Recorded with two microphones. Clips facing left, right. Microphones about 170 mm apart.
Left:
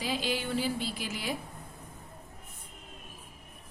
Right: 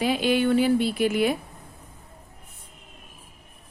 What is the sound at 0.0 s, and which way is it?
A woman's voice, 65° right (ahead or behind).